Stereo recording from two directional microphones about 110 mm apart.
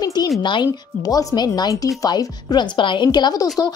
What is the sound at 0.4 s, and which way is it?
A woman's voice, 45° left (ahead or behind).